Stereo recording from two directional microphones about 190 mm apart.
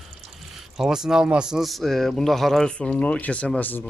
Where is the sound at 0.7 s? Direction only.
Centre (ahead or behind).